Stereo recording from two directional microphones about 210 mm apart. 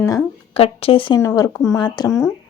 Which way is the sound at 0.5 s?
25° left (ahead or behind).